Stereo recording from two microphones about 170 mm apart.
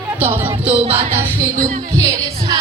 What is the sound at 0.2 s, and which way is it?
Speech, 10° right (ahead or behind).